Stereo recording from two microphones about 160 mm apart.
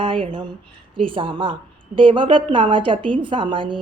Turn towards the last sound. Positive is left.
turn(degrees=-30)  # may be behind; listen again after turning